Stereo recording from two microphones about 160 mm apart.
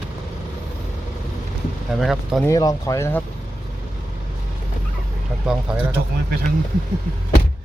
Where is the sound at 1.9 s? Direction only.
Centre (ahead or behind).